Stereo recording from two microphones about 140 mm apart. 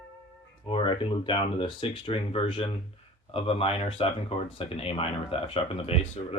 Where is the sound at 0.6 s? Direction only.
40° left (ahead or behind).